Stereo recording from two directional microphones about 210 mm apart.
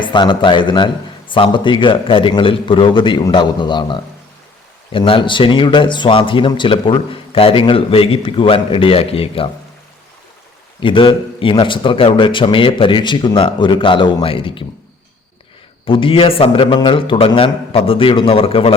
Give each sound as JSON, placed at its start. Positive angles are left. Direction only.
{"t": 0.0, "sound": "a man's voice", "side_deg": 20}
{"t": 10.8, "sound": "a man's voice", "side_deg": 25}
{"t": 15.9, "sound": "a man's voice", "side_deg": 25}